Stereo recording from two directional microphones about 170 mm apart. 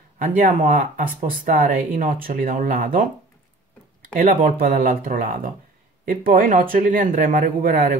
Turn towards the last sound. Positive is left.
turn(degrees=-50)  # may be behind; listen again after turning